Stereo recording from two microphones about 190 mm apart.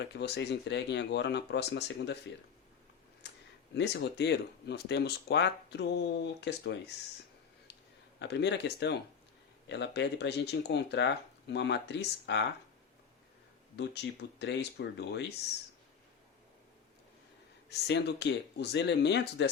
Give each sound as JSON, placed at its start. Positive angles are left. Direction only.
{"t": 0.0, "sound": "speech", "side_deg": 60}
{"t": 3.2, "sound": "a sound", "side_deg": 65}
{"t": 3.8, "sound": "speech", "side_deg": 65}
{"t": 8.2, "sound": "speech", "side_deg": 65}
{"t": 13.7, "sound": "speech", "side_deg": 60}
{"t": 17.7, "sound": "speech", "side_deg": 65}